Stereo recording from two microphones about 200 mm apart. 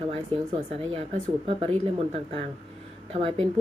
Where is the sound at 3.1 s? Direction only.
30° right (ahead or behind).